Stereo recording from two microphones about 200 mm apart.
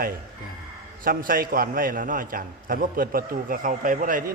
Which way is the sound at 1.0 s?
45° right (ahead or behind).